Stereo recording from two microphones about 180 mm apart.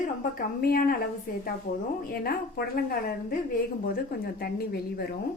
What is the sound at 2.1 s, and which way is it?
A woman's voice, 60° left (ahead or behind).